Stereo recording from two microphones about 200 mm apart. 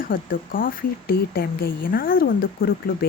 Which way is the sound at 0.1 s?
45° left (ahead or behind).